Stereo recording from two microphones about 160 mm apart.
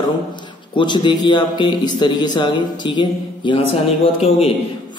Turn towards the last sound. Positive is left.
turn(degrees=35)  # may be behind; listen again after turning